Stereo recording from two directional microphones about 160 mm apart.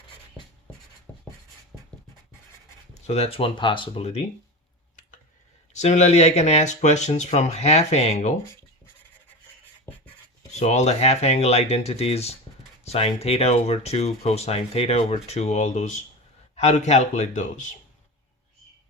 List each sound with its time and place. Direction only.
2.9 s speech: 40° left (ahead or behind)
5.7 s speech: 45° left (ahead or behind)
10.6 s speech: 45° left (ahead or behind)